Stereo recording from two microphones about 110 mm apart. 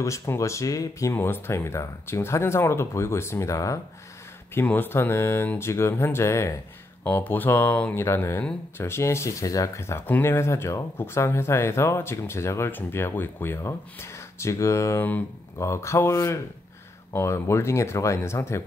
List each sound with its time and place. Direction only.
0.0 s speech: 25° left (ahead or behind)
4.6 s speech: 20° left (ahead or behind)